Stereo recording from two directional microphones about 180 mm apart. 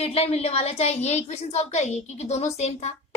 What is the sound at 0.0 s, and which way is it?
A woman's voice, 35° left (ahead or behind).